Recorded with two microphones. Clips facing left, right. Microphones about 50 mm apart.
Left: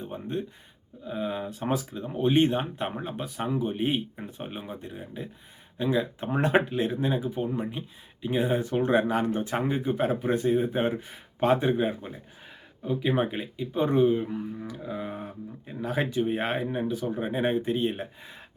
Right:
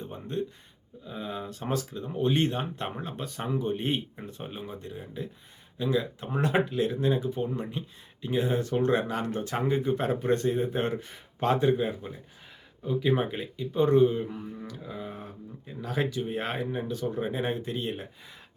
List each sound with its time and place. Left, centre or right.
0.0 s speech: centre